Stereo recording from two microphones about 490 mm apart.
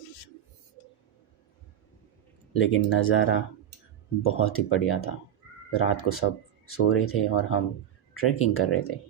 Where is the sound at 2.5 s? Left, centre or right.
Left.